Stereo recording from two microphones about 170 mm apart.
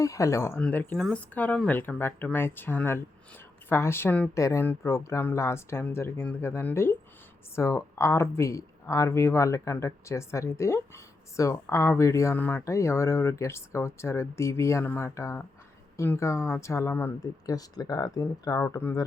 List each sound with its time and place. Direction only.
0.0 s speech: 20° left (ahead or behind)